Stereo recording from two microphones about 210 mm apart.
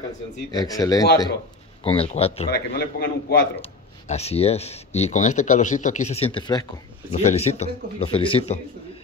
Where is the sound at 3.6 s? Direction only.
30° left (ahead or behind).